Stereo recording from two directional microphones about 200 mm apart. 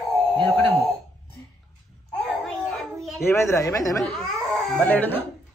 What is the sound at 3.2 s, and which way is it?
A man's voice, 15° left (ahead or behind).